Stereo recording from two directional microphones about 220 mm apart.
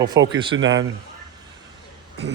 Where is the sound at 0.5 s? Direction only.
60° right (ahead or behind).